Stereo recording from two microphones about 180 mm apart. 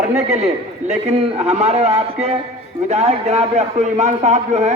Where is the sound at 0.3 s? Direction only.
35° right (ahead or behind).